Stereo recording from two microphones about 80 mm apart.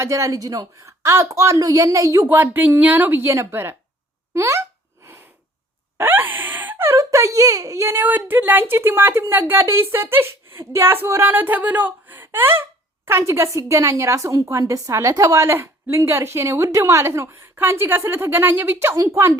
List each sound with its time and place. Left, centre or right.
0.0 s speech: right
0.9 s a woman's voice: right
1.3 s speech: right
2.2 s a woman's voice: right
6.0 s gasp: right
6.9 s a woman's voice: right
7.9 s a woman's voice: right
17.6 s a woman's voice: right